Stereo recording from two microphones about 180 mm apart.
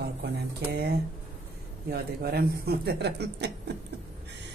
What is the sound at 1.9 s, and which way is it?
Speech, 60° right (ahead or behind).